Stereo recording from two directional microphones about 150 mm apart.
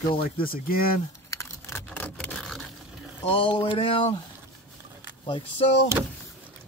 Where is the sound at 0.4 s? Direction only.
75° left (ahead or behind).